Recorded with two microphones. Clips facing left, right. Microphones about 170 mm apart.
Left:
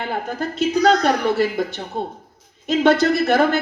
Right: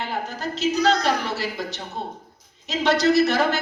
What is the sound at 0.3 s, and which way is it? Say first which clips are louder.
A man's voice: left 4 dB; 55° left (ahead or behind).